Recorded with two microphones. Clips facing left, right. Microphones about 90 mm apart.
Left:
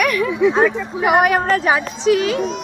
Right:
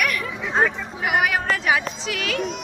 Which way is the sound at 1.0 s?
50° left (ahead or behind).